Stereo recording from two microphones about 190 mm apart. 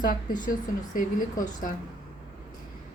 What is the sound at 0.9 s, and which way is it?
Speech, 45° left (ahead or behind).